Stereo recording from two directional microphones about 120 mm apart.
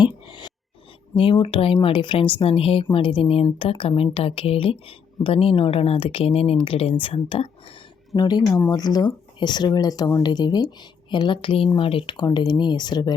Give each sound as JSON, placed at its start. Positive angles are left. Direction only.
{"t": 0.0, "sound": "a sound", "side_deg": 40}
{"t": 1.1, "sound": "speech", "side_deg": 45}
{"t": 8.1, "sound": "speech", "side_deg": 35}